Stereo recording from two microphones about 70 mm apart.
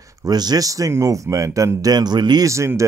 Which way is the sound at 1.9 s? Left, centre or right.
Right.